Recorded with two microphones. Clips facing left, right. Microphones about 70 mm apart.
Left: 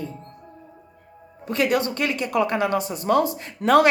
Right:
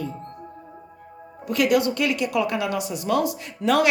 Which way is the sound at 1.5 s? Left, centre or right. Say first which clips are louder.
Right 2 dB; left.